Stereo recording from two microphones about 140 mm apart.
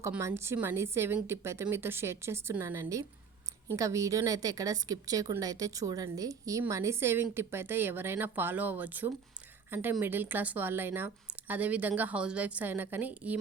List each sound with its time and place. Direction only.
0.2 s a woman's voice: 20° right (ahead or behind)